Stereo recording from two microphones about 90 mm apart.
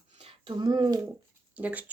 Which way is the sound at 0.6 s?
55° right (ahead or behind).